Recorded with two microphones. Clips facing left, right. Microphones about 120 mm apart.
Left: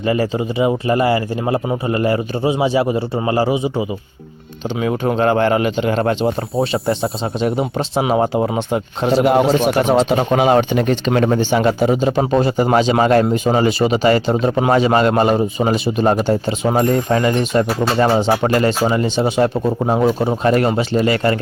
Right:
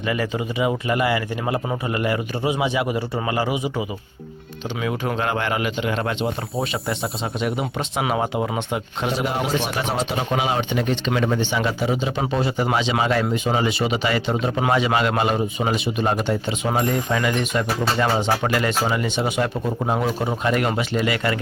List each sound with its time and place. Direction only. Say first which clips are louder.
0.0 s speech: left 6 dB; 35° left (ahead or behind)